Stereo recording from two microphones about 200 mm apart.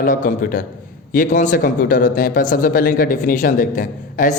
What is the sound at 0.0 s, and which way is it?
A man's voice, 40° left (ahead or behind).